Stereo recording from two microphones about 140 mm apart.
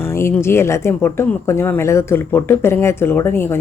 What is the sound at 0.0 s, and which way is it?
Speech, 15° left (ahead or behind).